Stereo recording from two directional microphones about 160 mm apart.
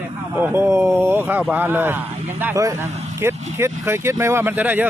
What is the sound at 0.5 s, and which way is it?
Speech, 15° right (ahead or behind).